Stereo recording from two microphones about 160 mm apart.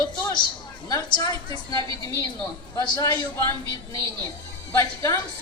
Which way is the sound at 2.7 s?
20° left (ahead or behind).